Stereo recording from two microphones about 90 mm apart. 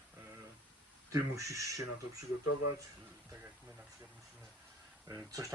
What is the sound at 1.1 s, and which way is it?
Speech, 35° right (ahead or behind).